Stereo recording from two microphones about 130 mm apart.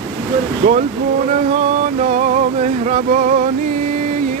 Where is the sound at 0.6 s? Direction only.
90° right.